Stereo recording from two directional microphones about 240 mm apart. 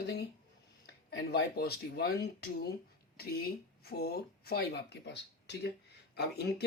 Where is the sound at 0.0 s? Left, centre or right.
Left.